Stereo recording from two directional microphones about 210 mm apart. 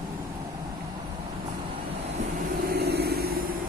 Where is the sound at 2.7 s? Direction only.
50° right (ahead or behind).